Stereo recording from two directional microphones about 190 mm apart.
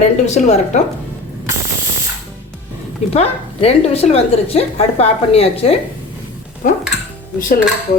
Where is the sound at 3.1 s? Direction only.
35° left (ahead or behind).